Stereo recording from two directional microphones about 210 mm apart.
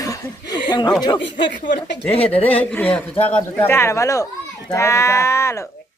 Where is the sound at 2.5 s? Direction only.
5° left (ahead or behind).